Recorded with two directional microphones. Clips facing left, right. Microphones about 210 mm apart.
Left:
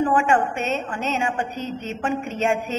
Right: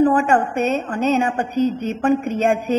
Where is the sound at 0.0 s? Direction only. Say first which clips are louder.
Right 4 dB; 35° right (ahead or behind).